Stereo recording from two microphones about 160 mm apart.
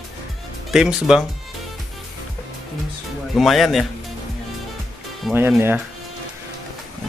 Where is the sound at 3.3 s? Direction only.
Centre (ahead or behind).